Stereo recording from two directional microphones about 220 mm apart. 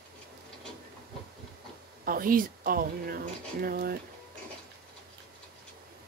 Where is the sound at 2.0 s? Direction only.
40° right (ahead or behind).